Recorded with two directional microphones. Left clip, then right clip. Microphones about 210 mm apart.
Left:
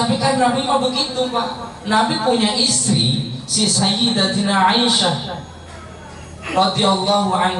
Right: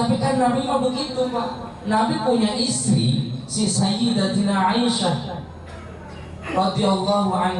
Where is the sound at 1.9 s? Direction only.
20° right (ahead or behind).